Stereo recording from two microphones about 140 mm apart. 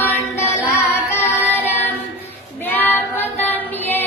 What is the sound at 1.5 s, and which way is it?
Music, 15° left (ahead or behind).